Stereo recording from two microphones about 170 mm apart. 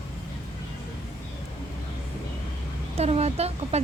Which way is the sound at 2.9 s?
35° right (ahead or behind).